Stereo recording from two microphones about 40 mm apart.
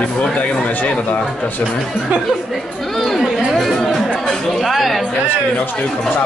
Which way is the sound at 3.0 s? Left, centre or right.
Centre.